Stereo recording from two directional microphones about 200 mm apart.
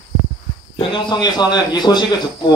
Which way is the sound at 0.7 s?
25° left (ahead or behind).